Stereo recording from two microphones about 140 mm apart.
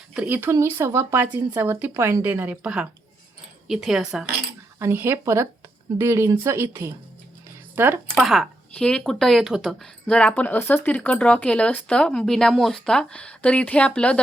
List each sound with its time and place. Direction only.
0.1 s speech: 10° right (ahead or behind)
4.8 s speech: 15° right (ahead or behind)
8.1 s speech: centre (ahead or behind)